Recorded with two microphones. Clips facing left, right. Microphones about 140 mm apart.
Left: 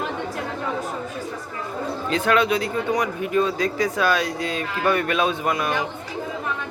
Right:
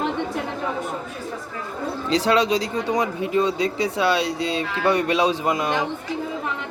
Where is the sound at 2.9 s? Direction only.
25° right (ahead or behind).